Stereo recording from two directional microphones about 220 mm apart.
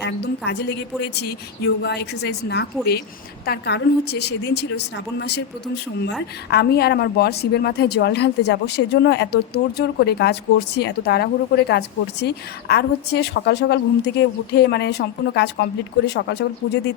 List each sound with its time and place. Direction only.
0.0 s a woman's voice: 50° left (ahead or behind)